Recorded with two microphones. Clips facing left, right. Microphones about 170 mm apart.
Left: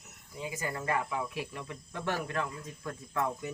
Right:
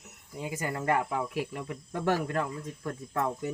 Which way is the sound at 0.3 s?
55° right (ahead or behind).